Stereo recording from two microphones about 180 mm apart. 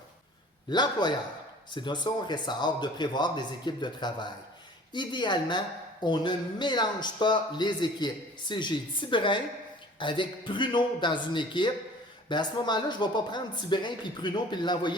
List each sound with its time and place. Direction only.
0.7 s speech: 25° left (ahead or behind)